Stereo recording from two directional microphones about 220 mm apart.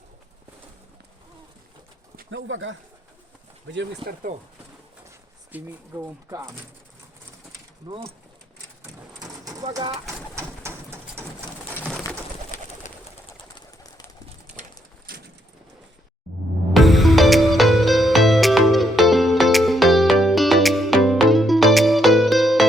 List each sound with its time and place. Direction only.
2.3 s speech: 60° right (ahead or behind); by 4.4 s 45° right (ahead or behind)
5.5 s speech: 10° right (ahead or behind)
7.9 s speech: 25° right (ahead or behind)
9.0 s a sound: 15° right (ahead or behind)
9.7 s speech: 20° right (ahead or behind)
10.3 s bird: 10° right (ahead or behind)
11.8 s bird: centre (ahead or behind)
15.1 s bird: 40° right (ahead or behind)
16.7 s music: centre (ahead or behind)